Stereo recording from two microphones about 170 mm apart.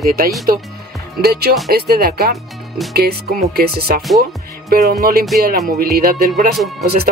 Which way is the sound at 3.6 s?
65° right (ahead or behind).